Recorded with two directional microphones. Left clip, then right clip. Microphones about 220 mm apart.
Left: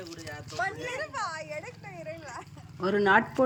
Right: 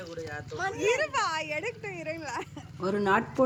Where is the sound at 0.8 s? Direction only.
15° right (ahead or behind).